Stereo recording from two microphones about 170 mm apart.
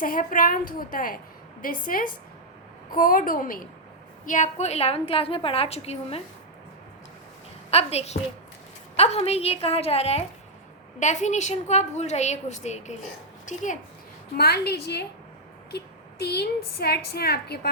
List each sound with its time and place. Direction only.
0.0 s a woman's voice: 55° left (ahead or behind)
4.3 s a woman's voice: 45° left (ahead or behind)
7.7 s a woman's voice: 35° left (ahead or behind)
14.3 s a woman's voice: 70° left (ahead or behind)